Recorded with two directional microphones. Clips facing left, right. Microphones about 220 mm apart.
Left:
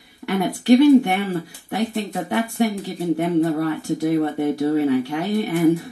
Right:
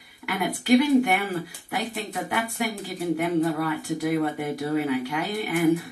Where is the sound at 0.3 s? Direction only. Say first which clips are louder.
Left 5 dB; 25° left (ahead or behind).